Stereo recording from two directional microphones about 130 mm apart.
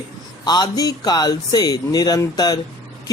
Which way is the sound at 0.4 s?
30° left (ahead or behind).